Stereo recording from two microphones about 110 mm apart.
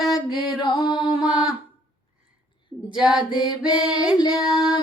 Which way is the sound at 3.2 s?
45° left (ahead or behind).